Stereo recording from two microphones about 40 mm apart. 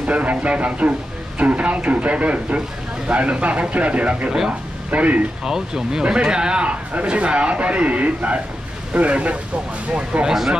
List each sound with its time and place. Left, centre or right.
0.0 s speech: right
5.4 s speech: centre; by 9.4 s right
10.2 s speech: centre